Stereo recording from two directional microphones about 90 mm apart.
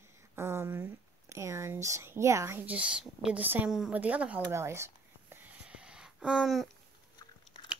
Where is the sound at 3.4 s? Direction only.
20° right (ahead or behind).